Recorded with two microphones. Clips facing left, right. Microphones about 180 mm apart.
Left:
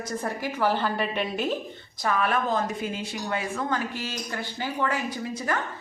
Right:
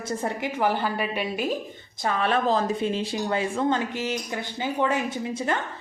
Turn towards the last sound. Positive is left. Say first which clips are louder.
# right 2 dB
turn(degrees=-25)  # may be behind; listen again after turning